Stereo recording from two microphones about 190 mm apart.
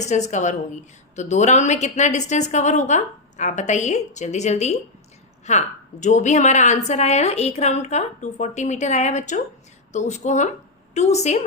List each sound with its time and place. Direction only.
0.0 s a woman's voice: 35° left (ahead or behind)